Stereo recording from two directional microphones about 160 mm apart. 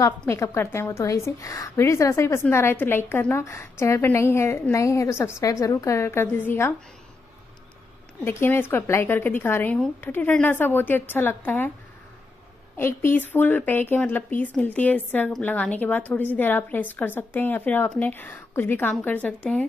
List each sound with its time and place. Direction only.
0.3 s a woman's voice: 15° left (ahead or behind)
8.2 s a woman's voice: 15° left (ahead or behind)
12.7 s a woman's voice: 15° left (ahead or behind)